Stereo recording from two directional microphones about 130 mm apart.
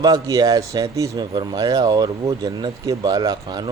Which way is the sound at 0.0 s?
30° right (ahead or behind).